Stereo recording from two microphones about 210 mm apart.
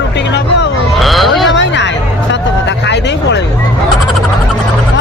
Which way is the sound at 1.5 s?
60° left (ahead or behind).